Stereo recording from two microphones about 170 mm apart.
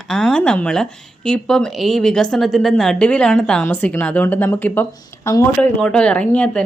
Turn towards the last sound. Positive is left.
turn(degrees=5)  # may be behind; listen again after turning